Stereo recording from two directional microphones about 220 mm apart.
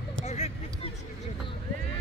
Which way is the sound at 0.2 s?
30° left (ahead or behind).